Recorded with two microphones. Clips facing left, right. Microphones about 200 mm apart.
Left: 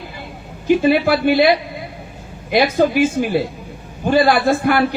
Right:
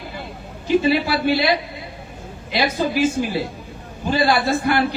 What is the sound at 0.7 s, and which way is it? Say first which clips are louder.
A man's voice: left 4 dB; 55° left (ahead or behind).